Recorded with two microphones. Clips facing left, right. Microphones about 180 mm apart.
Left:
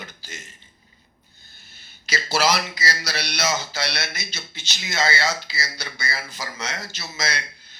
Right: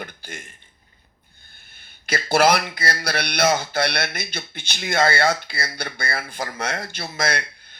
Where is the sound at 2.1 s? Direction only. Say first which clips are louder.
Right 5 dB; 55° right (ahead or behind).